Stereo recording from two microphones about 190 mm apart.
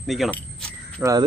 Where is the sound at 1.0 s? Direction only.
20° right (ahead or behind).